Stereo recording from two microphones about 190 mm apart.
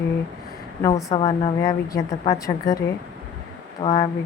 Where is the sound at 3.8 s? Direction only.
20° left (ahead or behind).